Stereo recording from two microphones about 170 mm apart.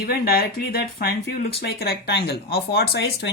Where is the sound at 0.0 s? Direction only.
65° left (ahead or behind).